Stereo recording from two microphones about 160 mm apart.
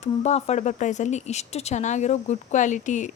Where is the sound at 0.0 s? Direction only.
45° left (ahead or behind).